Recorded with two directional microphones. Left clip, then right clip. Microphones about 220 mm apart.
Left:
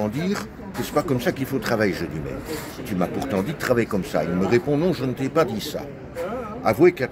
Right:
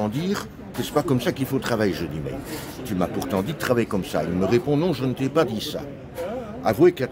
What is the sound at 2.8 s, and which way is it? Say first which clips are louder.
A man's voice: even; 25° right (ahead or behind).